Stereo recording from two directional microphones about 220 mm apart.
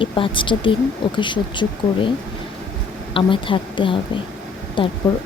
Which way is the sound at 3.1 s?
25° left (ahead or behind).